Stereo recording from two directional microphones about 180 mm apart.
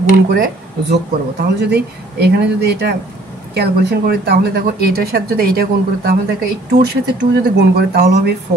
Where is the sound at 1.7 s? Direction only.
65° right (ahead or behind).